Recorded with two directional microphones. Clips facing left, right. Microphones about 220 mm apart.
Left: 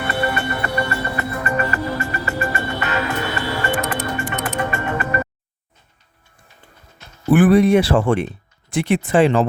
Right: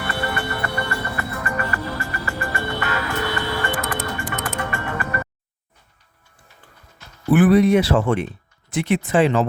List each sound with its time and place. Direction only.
0.0 s music: 20° left (ahead or behind)
7.3 s speech: 50° left (ahead or behind)
7.7 s speech: 30° left (ahead or behind)